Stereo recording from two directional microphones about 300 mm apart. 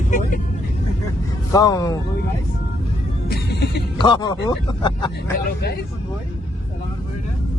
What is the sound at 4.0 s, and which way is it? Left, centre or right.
Speech, centre.